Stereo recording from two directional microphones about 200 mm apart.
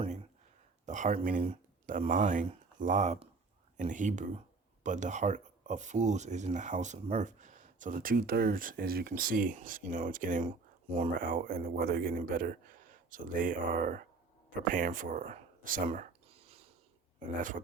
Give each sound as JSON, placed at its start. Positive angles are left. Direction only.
{"t": 0.9, "sound": "speech", "side_deg": -40}
{"t": 17.2, "sound": "speech", "side_deg": -40}